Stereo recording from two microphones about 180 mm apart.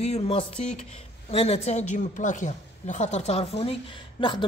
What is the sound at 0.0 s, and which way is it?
A man's voice, 35° left (ahead or behind).